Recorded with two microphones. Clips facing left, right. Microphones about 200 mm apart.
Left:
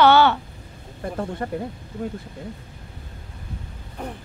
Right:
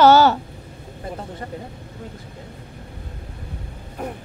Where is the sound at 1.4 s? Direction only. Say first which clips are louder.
Left 5 dB; 55° left (ahead or behind).